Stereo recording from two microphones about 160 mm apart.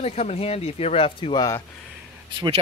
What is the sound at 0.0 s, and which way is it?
Speech, 40° left (ahead or behind).